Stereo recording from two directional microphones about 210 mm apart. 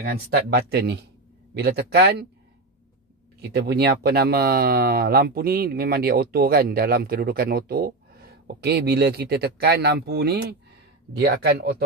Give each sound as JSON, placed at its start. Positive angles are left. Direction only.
{"t": 0.0, "sound": "speech", "side_deg": -45}
{"t": 3.3, "sound": "speech", "side_deg": -50}